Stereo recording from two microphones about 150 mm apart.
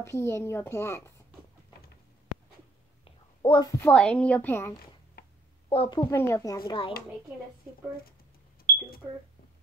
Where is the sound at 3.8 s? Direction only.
5° left (ahead or behind).